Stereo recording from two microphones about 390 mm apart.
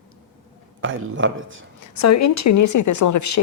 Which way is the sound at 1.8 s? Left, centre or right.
Left.